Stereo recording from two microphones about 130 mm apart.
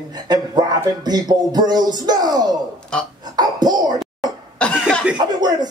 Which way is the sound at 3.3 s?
30° right (ahead or behind).